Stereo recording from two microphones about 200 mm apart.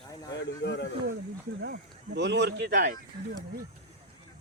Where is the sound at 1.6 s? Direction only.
60° right (ahead or behind).